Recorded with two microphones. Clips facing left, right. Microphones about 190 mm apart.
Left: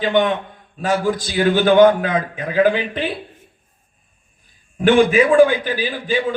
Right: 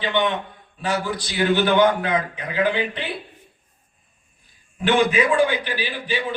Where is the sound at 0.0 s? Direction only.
45° left (ahead or behind).